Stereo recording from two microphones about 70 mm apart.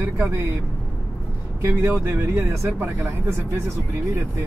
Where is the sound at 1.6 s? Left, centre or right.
Right.